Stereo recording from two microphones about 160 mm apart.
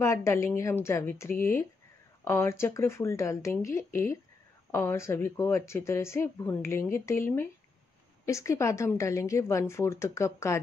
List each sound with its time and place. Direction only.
0.0 s speech: 15° left (ahead or behind)
8.3 s speech: 20° left (ahead or behind)